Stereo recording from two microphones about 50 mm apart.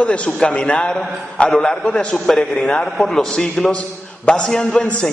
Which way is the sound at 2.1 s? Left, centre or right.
Centre.